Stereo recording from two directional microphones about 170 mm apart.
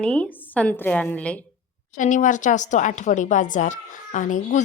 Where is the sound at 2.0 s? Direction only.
45° left (ahead or behind).